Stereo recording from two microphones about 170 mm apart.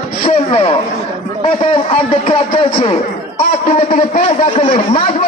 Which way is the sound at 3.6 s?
40° left (ahead or behind).